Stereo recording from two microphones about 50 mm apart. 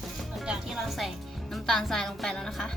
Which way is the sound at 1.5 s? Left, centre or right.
Centre.